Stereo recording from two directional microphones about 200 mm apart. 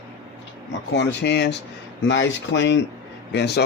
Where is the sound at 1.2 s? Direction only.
60° left (ahead or behind).